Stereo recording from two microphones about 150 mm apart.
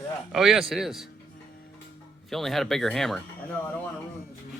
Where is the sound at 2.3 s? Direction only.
Centre (ahead or behind).